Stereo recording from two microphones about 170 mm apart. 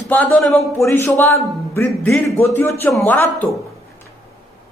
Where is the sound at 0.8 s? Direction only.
15° left (ahead or behind).